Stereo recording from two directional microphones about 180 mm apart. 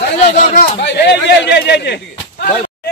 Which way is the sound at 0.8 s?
70° left (ahead or behind).